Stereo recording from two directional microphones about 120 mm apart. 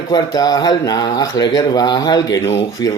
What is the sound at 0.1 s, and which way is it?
Speech, 35° left (ahead or behind).